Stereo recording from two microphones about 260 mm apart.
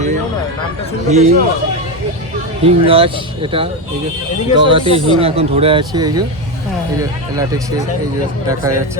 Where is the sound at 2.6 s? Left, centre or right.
Right.